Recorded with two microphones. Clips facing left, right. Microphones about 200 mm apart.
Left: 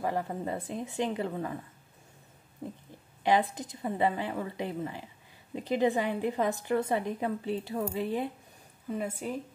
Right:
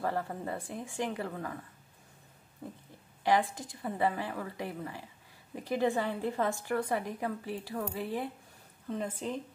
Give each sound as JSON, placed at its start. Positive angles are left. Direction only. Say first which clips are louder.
{"t": 0.0, "sound": "a woman's voice", "louder": "left 2 dB", "side_deg": 15}
{"t": 2.6, "sound": "a woman's voice", "louder": "left 4 dB", "side_deg": 20}
{"t": 8.8, "sound": "a woman's voice", "louder": "left 2 dB", "side_deg": 10}